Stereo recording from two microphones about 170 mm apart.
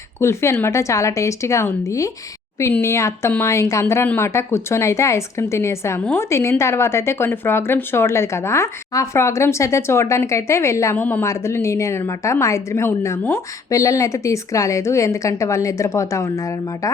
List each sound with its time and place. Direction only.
0.2 s speech: 15° left (ahead or behind)